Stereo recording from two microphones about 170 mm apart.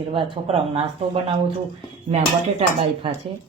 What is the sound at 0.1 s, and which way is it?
Speech, 30° right (ahead or behind).